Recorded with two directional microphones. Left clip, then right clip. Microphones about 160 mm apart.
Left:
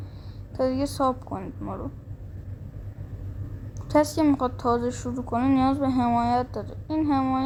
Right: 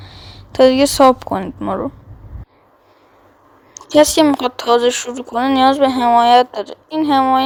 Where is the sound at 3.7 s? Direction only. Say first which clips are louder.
Right 11 dB; 40° right (ahead or behind).